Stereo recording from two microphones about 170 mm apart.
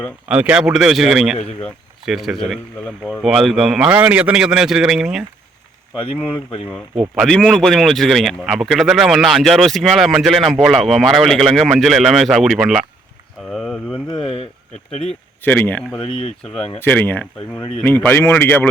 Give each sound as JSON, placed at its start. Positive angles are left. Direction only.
{"t": 0.3, "sound": "speech", "side_deg": -5}
{"t": 6.7, "sound": "speech", "side_deg": 5}
{"t": 15.0, "sound": "speech", "side_deg": 10}
{"t": 16.0, "sound": "speech", "side_deg": 35}
{"t": 16.8, "sound": "speech", "side_deg": 10}